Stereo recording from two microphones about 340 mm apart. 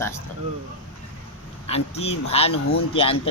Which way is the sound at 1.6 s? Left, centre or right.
Centre.